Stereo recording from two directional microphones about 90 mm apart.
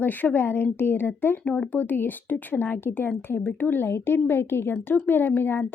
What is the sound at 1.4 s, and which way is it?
Speech, 10° left (ahead or behind).